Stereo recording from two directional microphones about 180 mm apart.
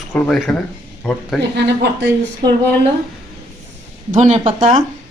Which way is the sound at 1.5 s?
70° right (ahead or behind).